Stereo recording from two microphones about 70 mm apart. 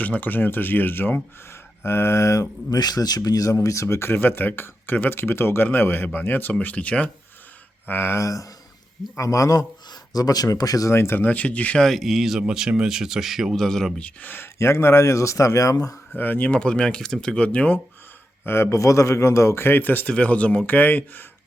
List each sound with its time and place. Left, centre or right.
0.0 s speech: left
2.6 s speech: left; by 7.1 s centre
7.9 s speech: left
8.2 s speech: left
10.9 s speech: left
11.2 s speech: centre
11.8 s speech: centre
14.0 s speech: left
16.1 s speech: left
16.6 s speech: centre
18.4 s speech: left